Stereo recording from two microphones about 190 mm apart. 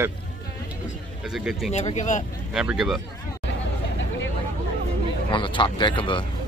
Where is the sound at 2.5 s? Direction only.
5° right (ahead or behind).